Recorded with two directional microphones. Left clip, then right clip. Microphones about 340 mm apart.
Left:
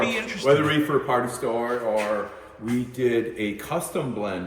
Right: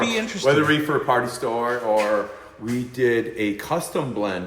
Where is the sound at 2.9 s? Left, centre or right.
Centre.